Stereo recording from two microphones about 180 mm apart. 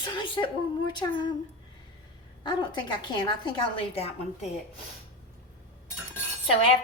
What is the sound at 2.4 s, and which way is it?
A woman's voice, 25° left (ahead or behind).